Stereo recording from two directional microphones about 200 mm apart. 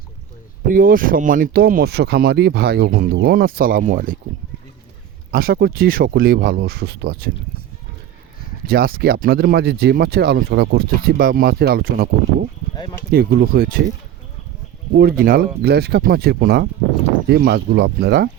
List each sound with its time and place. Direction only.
0.7 s speech: 45° right (ahead or behind)
5.3 s speech: 50° right (ahead or behind)
8.6 s speech: 50° right (ahead or behind)
12.7 s speech: 20° left (ahead or behind)
13.1 s speech: 50° right (ahead or behind)
14.9 s speech: 50° right (ahead or behind)